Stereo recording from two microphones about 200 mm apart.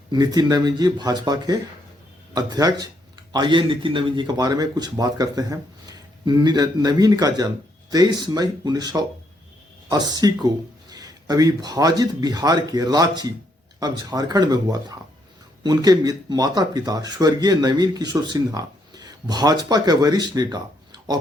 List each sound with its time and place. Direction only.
0.1 s speech: 20° right (ahead or behind)